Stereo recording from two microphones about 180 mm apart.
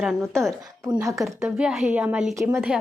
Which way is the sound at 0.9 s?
15° right (ahead or behind).